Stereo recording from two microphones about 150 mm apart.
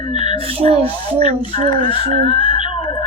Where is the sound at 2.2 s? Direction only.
35° left (ahead or behind).